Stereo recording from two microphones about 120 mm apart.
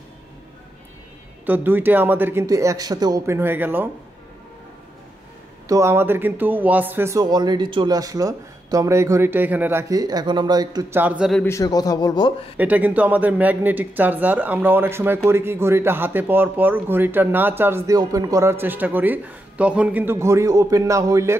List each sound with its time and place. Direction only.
1.4 s speech: 15° right (ahead or behind)
2.4 s a man's voice: 25° right (ahead or behind)
5.7 s speech: 25° right (ahead or behind)
7.2 s speech: 35° right (ahead or behind)
10.9 s speech: 15° right (ahead or behind)
11.4 s a man's voice: 25° left (ahead or behind)
12.5 s a man's voice: 15° right (ahead or behind)